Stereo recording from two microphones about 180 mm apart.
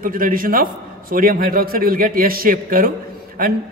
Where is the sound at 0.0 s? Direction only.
50° right (ahead or behind).